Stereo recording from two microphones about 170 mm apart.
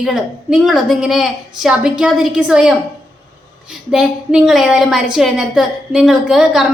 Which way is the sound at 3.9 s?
5° right (ahead or behind).